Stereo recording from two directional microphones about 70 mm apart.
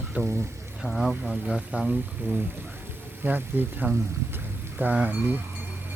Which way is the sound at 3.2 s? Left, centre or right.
Right.